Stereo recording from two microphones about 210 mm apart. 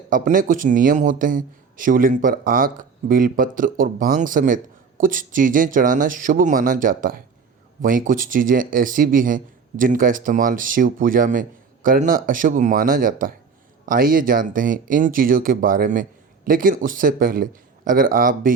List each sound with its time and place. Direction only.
0.1 s a man's voice: 40° right (ahead or behind)